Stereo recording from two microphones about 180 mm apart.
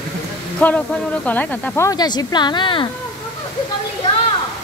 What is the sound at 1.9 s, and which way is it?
A woman's voice, 20° left (ahead or behind).